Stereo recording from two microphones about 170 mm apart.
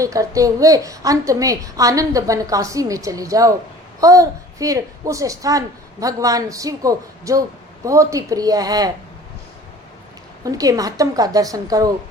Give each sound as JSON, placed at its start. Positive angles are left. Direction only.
{"t": 0.0, "sound": "a woman's voice", "side_deg": -20}
{"t": 10.4, "sound": "a woman's voice", "side_deg": -20}